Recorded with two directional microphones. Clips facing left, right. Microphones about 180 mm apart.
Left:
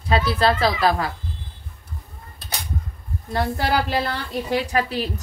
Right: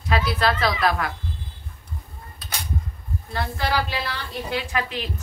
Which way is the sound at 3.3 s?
45° left (ahead or behind).